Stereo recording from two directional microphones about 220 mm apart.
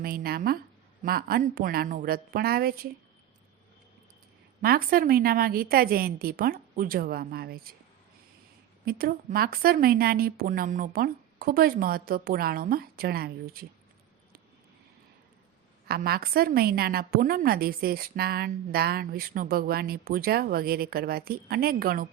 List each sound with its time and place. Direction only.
0.0 s a woman's voice: 45° right (ahead or behind)
4.6 s a woman's voice: 40° right (ahead or behind)
8.8 s speech: 40° right (ahead or behind)
15.9 s a woman's voice: 45° right (ahead or behind)